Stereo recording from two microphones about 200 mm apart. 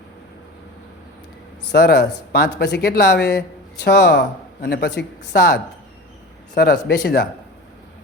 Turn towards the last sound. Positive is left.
turn(degrees=55)  # may be behind; listen again after turning